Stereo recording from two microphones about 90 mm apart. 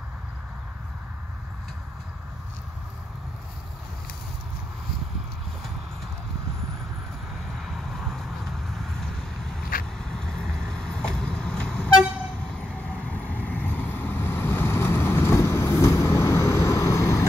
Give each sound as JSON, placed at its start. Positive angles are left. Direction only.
{"t": 7.5, "sound": "vehicle", "side_deg": 0}
{"t": 9.9, "sound": "vehicle", "side_deg": 5}